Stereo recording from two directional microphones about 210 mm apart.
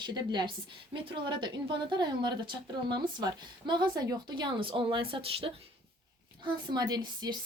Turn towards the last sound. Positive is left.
turn(degrees=-20)  # may be behind; listen again after turning